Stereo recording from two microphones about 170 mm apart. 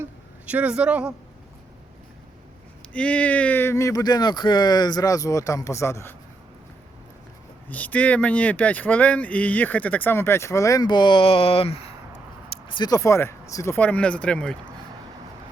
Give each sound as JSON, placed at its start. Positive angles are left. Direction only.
{"t": 0.0, "sound": "a sound", "side_deg": -10}
{"t": 2.9, "sound": "speech", "side_deg": 10}
{"t": 7.7, "sound": "speech", "side_deg": 10}
{"t": 13.7, "sound": "speech", "side_deg": 10}